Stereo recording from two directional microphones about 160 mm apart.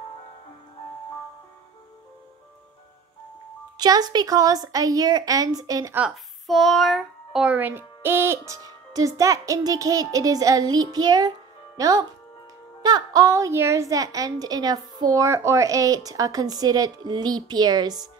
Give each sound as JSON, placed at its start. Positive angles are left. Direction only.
{"t": 3.7, "sound": "a woman's voice", "side_deg": -25}
{"t": 5.9, "sound": "a woman's voice", "side_deg": -5}